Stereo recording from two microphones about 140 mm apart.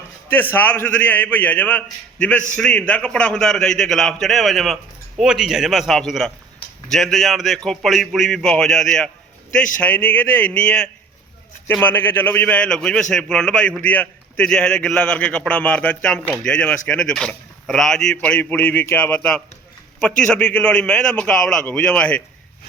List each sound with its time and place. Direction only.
0.5 s a man's voice: 15° left (ahead or behind)